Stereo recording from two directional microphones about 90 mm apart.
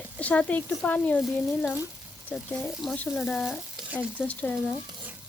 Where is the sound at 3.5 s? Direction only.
15° right (ahead or behind).